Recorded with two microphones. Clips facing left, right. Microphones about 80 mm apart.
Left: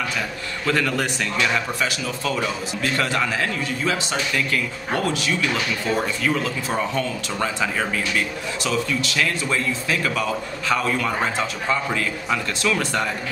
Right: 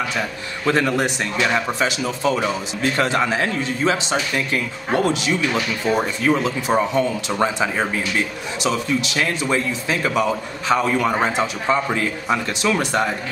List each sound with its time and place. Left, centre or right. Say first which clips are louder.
0.7 s speech: right 4 dB; right